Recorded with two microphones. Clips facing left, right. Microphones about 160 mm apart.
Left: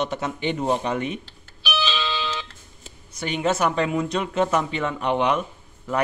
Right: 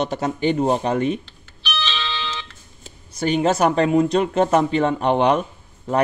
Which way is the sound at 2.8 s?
35° right (ahead or behind).